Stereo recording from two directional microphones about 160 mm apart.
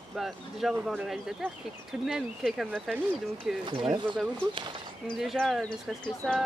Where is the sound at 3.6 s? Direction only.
30° right (ahead or behind).